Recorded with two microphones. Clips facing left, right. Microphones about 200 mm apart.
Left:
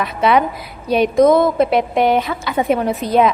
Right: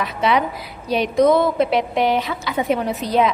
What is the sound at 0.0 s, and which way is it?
A woman's voice, 55° left (ahead or behind).